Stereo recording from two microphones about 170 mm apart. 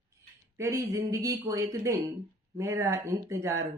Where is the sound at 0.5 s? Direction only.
15° right (ahead or behind).